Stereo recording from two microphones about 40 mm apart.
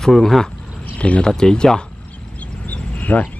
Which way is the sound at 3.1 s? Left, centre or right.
Left.